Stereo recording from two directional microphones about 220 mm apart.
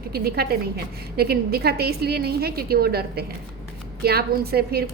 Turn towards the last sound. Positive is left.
turn(degrees=-45)  # may be behind; listen again after turning